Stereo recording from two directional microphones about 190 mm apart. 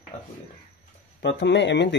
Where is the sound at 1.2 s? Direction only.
70° left (ahead or behind).